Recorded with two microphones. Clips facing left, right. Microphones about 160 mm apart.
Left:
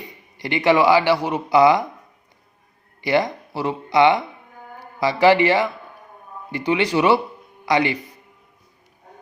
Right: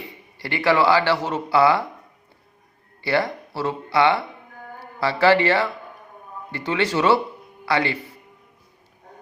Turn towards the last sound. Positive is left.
turn(degrees=15)  # may be behind; listen again after turning